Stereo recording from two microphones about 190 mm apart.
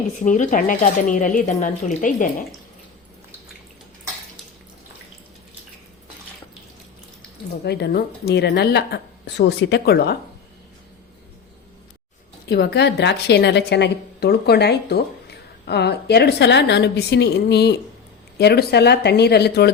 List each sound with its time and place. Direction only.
0.2 s speech: 40° left (ahead or behind)
7.6 s a woman's voice: 60° left (ahead or behind)
12.5 s a woman's voice: 60° left (ahead or behind)